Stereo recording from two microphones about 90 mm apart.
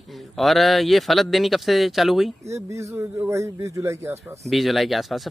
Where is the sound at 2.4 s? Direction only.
35° right (ahead or behind).